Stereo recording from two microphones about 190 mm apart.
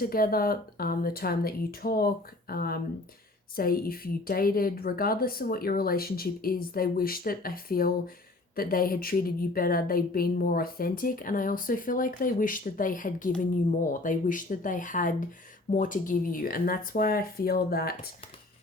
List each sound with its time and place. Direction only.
0.0 s a woman's voice: 50° left (ahead or behind)